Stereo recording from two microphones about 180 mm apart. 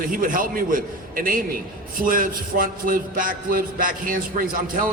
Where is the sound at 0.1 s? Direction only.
50° right (ahead or behind).